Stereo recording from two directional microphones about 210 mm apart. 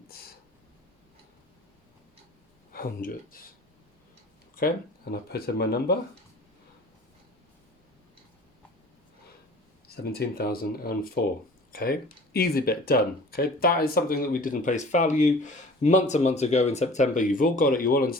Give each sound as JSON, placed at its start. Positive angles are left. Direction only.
{"t": 2.7, "sound": "speech", "side_deg": 45}
{"t": 5.1, "sound": "speech", "side_deg": 50}
{"t": 9.9, "sound": "speech", "side_deg": 45}